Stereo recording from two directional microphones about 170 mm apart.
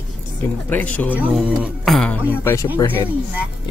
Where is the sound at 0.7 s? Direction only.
10° left (ahead or behind).